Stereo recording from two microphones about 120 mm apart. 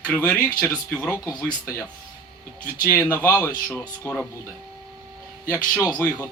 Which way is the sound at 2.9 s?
20° left (ahead or behind).